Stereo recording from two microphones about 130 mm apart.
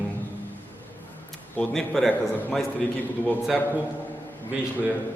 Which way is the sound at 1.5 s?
Centre (ahead or behind).